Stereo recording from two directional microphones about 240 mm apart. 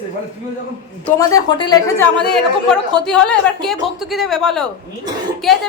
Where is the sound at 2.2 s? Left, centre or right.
Centre.